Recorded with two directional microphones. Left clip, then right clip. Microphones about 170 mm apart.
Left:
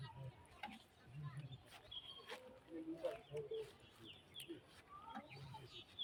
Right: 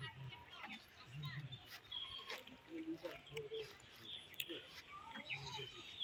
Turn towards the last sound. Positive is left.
turn(degrees=5)  # may be behind; listen again after turning